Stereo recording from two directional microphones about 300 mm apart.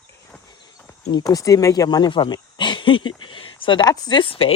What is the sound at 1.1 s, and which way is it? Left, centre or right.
Speech, centre.